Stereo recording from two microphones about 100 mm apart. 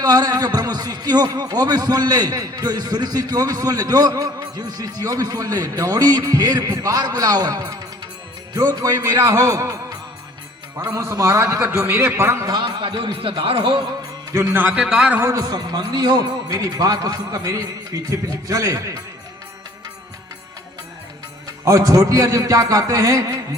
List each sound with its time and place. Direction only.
0.0 s a man's voice: 40° right (ahead or behind)
12.5 s a man's voice: 50° right (ahead or behind)
14.3 s a man's voice: 20° right (ahead or behind)
14.8 s a man's voice: 10° right (ahead or behind)
15.2 s a man's voice: 30° right (ahead or behind)
21.4 s a man's voice: 35° right (ahead or behind)